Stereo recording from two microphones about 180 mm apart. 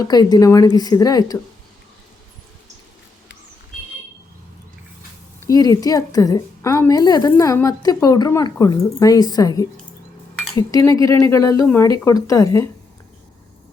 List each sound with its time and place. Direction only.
0.0 s a woman's voice: 20° left (ahead or behind)
5.4 s a woman's voice: 20° left (ahead or behind)